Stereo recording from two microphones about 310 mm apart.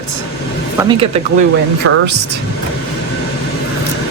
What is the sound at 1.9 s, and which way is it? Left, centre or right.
Speech, right.